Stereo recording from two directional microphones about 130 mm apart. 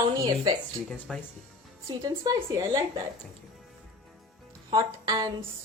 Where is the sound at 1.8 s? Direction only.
25° right (ahead or behind).